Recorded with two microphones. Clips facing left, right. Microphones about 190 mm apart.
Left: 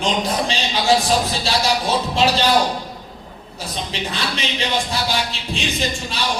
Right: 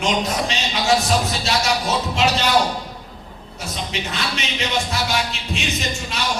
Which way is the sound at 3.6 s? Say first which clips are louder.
Left 1 dB; 30° left (ahead or behind).